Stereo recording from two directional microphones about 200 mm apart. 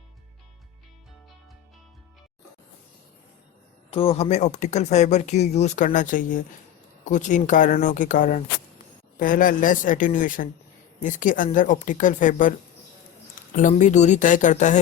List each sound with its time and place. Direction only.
3.9 s speech: 30° left (ahead or behind)